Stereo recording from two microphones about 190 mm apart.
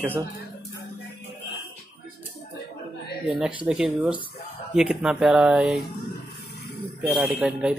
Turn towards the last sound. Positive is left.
turn(degrees=-5)  # may be behind; listen again after turning